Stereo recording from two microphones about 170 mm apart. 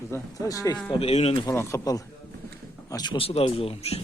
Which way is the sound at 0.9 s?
35° left (ahead or behind).